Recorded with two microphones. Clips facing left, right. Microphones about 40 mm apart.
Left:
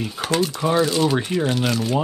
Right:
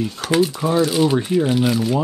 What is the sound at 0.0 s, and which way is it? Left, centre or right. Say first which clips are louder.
Speech: right 2 dB; centre.